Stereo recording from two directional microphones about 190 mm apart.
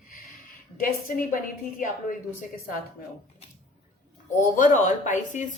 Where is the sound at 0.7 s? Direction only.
50° left (ahead or behind).